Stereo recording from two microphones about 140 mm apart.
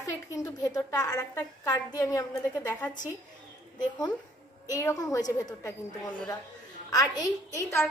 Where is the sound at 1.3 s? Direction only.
20° left (ahead or behind).